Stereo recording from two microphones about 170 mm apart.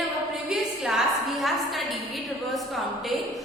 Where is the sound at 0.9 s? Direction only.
Centre (ahead or behind).